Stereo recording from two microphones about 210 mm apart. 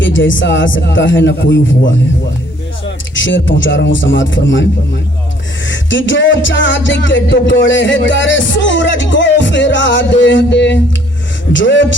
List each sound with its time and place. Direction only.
0.0 s music: 60° left (ahead or behind)
3.2 s music: 60° left (ahead or behind)
5.6 s music: 60° left (ahead or behind)